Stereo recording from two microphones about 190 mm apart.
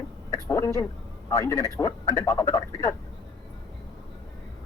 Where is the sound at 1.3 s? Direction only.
15° left (ahead or behind).